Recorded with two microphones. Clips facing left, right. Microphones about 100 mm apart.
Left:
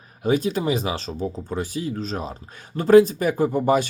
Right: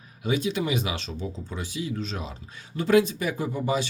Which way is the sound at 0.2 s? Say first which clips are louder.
Left 5 dB; 45° left (ahead or behind).